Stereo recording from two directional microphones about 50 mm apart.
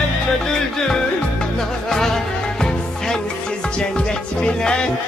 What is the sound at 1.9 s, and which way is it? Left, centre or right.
Music, centre.